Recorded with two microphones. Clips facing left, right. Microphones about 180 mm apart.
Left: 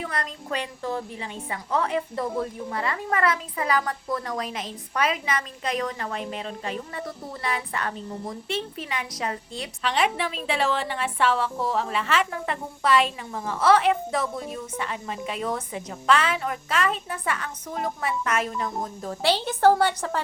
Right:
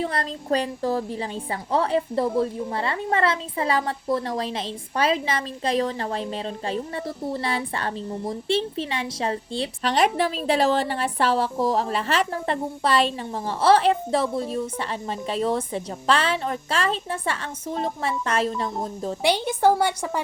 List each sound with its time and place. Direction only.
0.0 s a woman's voice: 30° right (ahead or behind)
19.2 s a woman's voice: 15° right (ahead or behind)